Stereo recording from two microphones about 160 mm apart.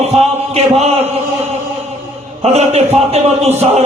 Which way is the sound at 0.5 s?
40° right (ahead or behind).